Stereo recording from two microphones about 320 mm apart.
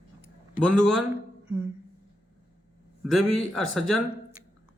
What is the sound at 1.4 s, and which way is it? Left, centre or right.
Music, centre.